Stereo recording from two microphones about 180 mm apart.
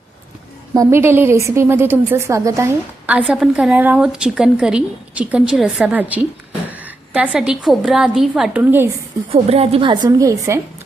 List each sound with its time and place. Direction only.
0.7 s a woman's voice: 15° right (ahead or behind)
9.3 s a woman's voice: 35° right (ahead or behind); by 10.6 s 20° right (ahead or behind)